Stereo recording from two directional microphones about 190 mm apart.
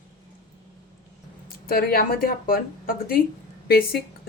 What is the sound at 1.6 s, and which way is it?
Speech, 50° left (ahead or behind).